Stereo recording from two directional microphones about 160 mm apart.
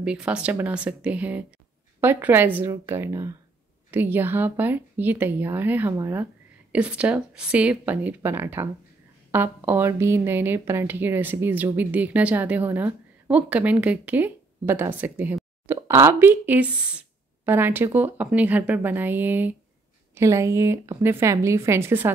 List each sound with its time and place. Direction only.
0.0 s speech: 5° right (ahead or behind)
6.7 s speech: 5° right (ahead or behind)